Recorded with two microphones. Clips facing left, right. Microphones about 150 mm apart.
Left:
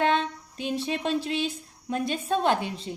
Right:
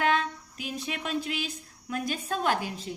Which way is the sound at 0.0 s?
30° left (ahead or behind).